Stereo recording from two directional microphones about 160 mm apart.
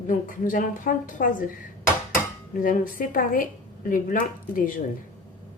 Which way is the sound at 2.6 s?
60° left (ahead or behind).